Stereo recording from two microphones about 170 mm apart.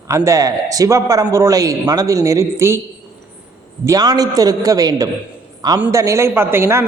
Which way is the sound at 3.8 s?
20° right (ahead or behind).